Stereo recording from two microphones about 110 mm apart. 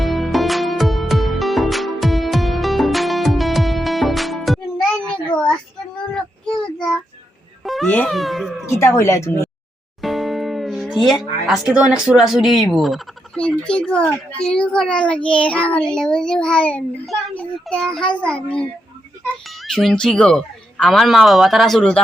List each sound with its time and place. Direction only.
0.0 s music: centre (ahead or behind)
5.3 s child singing: 10° left (ahead or behind)
7.6 s a sound: centre (ahead or behind)
8.6 s speech: 25° left (ahead or behind)
10.0 s music: centre (ahead or behind)
11.7 s a child's voice: 10° right (ahead or behind)